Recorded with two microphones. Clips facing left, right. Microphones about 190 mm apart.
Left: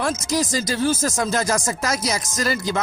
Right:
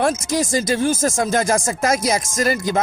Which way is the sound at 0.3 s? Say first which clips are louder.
Right 2 dB; 25° right (ahead or behind).